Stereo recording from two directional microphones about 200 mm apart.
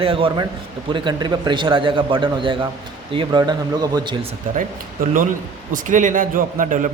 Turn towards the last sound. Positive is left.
turn(degrees=-40)  # may be behind; listen again after turning